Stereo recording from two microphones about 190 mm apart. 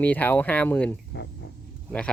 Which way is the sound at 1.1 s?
60° left (ahead or behind).